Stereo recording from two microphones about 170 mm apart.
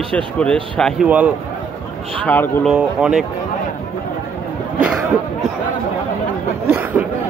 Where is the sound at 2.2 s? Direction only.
10° left (ahead or behind).